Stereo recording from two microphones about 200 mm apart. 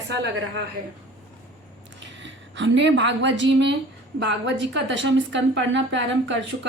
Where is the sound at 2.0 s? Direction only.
65° right (ahead or behind).